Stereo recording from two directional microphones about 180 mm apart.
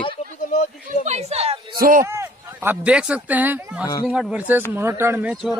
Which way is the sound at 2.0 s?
15° right (ahead or behind).